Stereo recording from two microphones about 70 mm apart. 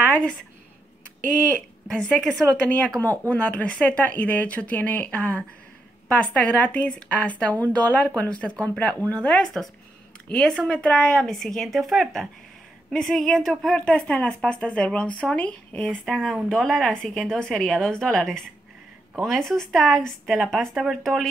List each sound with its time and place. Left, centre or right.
1.9 s speech: centre
3.0 s speech: left; by 13.8 s centre
13.8 s speech: centre